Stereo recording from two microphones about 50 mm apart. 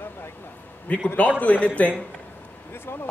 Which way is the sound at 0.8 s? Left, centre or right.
Left.